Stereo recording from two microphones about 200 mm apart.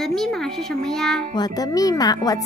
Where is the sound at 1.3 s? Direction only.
20° left (ahead or behind).